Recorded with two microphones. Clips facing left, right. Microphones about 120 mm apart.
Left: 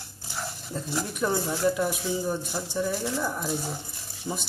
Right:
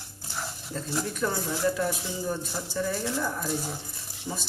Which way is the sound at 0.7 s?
15° left (ahead or behind).